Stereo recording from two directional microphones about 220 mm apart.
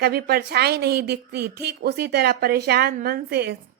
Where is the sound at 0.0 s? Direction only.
45° right (ahead or behind).